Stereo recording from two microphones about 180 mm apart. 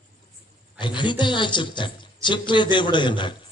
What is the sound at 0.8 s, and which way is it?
A man's voice, 25° left (ahead or behind).